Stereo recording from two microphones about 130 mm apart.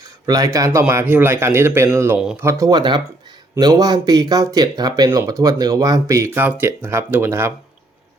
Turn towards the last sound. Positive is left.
turn(degrees=-20)  # may be behind; listen again after turning